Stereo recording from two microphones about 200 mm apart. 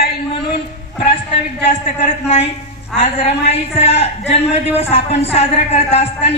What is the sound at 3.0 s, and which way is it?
A woman's voice, 30° left (ahead or behind).